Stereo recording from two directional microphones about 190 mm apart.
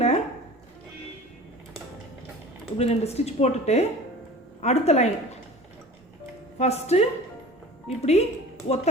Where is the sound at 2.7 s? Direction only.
35° left (ahead or behind).